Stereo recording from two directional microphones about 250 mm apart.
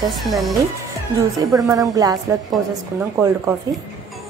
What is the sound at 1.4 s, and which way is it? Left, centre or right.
Speech, centre.